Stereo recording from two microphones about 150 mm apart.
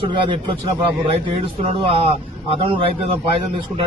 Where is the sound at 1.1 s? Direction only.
40° right (ahead or behind).